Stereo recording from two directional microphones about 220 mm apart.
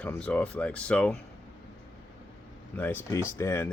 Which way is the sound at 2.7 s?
10° left (ahead or behind).